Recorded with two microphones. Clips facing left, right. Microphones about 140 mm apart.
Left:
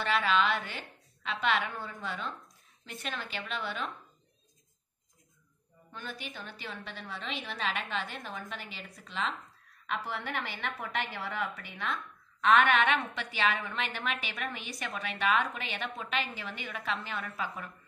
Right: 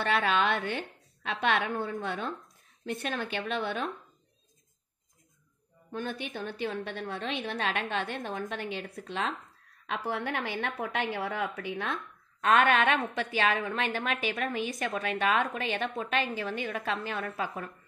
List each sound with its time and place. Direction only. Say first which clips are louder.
0.1 s a woman's voice: even; 55° right (ahead or behind)
5.9 s a woman's voice: right 7 dB; 50° right (ahead or behind)
10.5 s a woman's voice: right 4 dB; 50° right (ahead or behind)